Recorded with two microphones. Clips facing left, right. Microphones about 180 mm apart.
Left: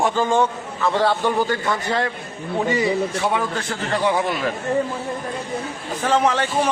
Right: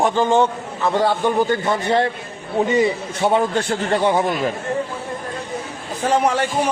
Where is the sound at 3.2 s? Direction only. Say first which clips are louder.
Right 5 dB; 30° right (ahead or behind).